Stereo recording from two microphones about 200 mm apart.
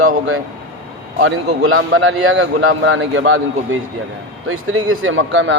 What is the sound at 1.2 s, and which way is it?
A man's voice, 90° right.